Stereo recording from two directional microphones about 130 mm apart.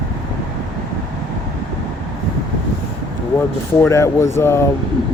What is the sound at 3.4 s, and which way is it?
Speech, 20° left (ahead or behind).